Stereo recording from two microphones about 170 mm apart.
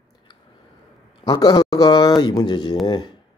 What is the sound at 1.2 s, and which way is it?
Speech, 25° left (ahead or behind).